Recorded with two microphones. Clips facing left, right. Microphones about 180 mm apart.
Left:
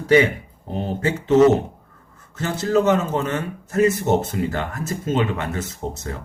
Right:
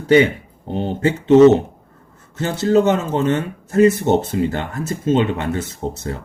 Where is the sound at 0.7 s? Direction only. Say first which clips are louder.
Right 4 dB; 30° right (ahead or behind).